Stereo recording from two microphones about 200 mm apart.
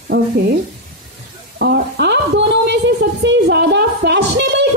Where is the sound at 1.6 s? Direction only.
55° right (ahead or behind).